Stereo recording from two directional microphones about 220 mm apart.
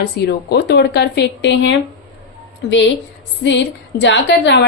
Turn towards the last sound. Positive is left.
turn(degrees=50)  # may be behind; listen again after turning